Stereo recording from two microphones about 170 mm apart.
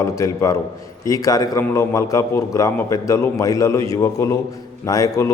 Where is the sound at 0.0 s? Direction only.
20° left (ahead or behind).